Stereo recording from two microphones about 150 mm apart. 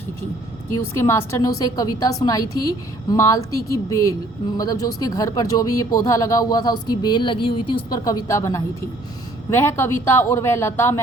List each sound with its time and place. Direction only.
0.7 s a woman's voice: 15° left (ahead or behind)